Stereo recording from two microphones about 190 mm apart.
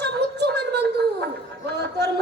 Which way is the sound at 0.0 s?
60° right (ahead or behind).